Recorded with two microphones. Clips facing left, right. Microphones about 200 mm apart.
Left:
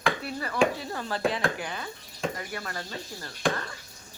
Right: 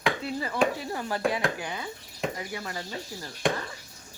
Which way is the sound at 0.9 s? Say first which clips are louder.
Right 1 dB; 15° right (ahead or behind).